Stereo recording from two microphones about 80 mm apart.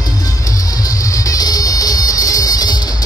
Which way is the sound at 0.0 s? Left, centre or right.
Left.